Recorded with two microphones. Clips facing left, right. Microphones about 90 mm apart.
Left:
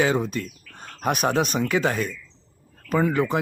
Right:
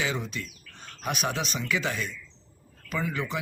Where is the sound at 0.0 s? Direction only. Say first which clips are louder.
Left 9 dB; 45° left (ahead or behind).